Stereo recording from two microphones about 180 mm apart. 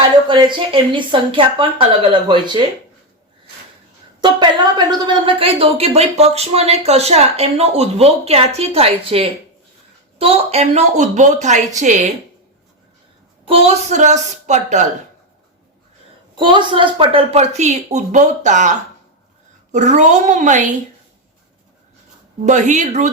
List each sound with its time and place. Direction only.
0.0 s speech: 25° right (ahead or behind)
4.2 s speech: 25° right (ahead or behind); by 12.0 s 40° right (ahead or behind)
13.5 s speech: 35° right (ahead or behind)
16.3 s a woman's voice: 25° right (ahead or behind); by 20.7 s 45° right (ahead or behind)
22.4 s speech: 40° right (ahead or behind)